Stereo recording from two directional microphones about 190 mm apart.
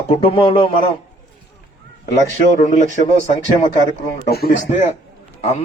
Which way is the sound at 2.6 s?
40° left (ahead or behind).